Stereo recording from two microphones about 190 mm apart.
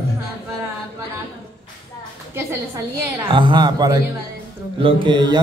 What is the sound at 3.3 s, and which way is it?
A man's voice, 25° right (ahead or behind).